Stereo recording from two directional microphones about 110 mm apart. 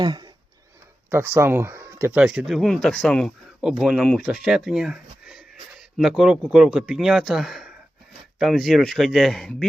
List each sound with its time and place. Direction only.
0.0 s speech: 40° right (ahead or behind)
1.1 s speech: 20° right (ahead or behind)
2.1 s speech: 5° right (ahead or behind)
3.6 s speech: 5° right (ahead or behind)
5.7 s a sound: 5° right (ahead or behind)
6.7 s speech: 10° right (ahead or behind)